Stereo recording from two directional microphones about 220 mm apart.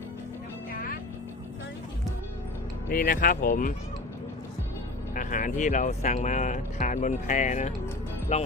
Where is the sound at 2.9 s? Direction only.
40° left (ahead or behind).